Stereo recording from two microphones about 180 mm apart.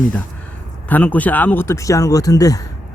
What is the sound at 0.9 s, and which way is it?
Speech, 10° left (ahead or behind).